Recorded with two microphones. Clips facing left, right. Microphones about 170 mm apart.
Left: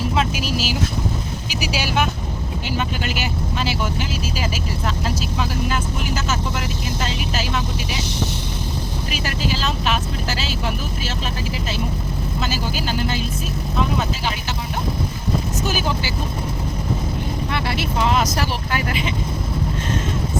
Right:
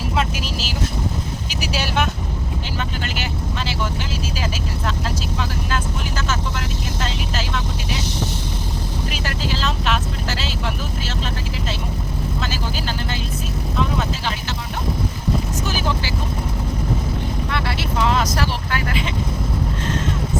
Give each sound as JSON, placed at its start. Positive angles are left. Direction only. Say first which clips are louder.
{"t": 0.2, "sound": "vehicle", "louder": "left 1 dB", "side_deg": 5}
{"t": 7.0, "sound": "vehicle", "louder": "left 1 dB", "side_deg": 5}
{"t": 9.1, "sound": "vehicle", "louder": "left 4 dB", "side_deg": 5}
{"t": 12.4, "sound": "vehicle", "louder": "left 5 dB", "side_deg": 5}
{"t": 17.5, "sound": "vehicle", "louder": "left 2 dB", "side_deg": 15}